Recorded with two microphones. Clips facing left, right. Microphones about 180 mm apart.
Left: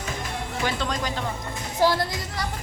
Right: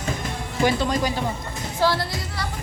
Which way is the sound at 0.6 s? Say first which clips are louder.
Right 7 dB; 10° right (ahead or behind).